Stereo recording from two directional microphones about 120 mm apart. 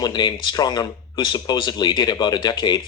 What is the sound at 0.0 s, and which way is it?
Speech, 35° left (ahead or behind).